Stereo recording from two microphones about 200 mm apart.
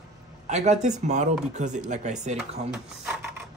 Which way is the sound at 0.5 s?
35° right (ahead or behind).